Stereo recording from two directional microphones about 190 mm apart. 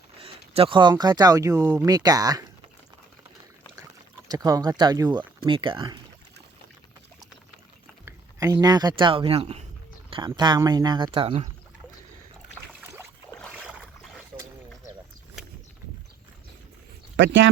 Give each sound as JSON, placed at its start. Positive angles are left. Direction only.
{"t": 0.2, "sound": "speech", "side_deg": -30}
{"t": 4.3, "sound": "speech", "side_deg": -20}
{"t": 8.0, "sound": "speech", "side_deg": -15}
{"t": 12.8, "sound": "boat", "side_deg": -15}
{"t": 17.2, "sound": "speech", "side_deg": -75}